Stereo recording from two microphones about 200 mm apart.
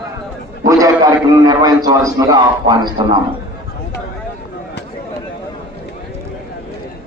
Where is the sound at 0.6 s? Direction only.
15° right (ahead or behind).